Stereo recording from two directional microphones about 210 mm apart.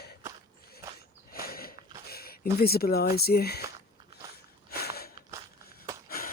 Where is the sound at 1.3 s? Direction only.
45° left (ahead or behind).